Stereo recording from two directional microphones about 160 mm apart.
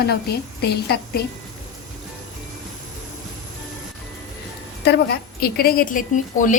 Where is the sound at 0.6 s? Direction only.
90° left.